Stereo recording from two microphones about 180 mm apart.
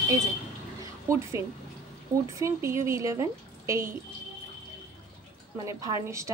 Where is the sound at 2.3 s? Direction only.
15° right (ahead or behind).